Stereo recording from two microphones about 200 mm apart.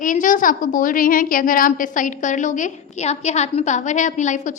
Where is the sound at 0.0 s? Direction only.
40° left (ahead or behind).